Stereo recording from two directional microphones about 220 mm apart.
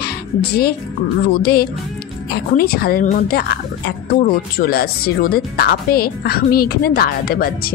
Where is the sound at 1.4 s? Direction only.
45° left (ahead or behind).